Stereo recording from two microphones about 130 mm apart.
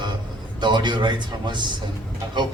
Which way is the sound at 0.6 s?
35° right (ahead or behind).